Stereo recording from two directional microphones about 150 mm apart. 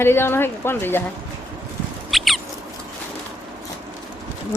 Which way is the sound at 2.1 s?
Centre (ahead or behind).